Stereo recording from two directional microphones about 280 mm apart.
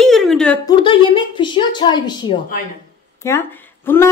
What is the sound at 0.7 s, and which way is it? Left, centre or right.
Speech, centre.